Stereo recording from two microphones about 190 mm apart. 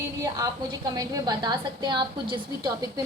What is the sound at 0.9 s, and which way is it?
A woman's voice, 20° right (ahead or behind).